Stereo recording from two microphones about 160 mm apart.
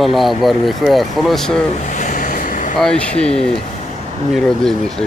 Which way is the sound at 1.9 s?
50° left (ahead or behind).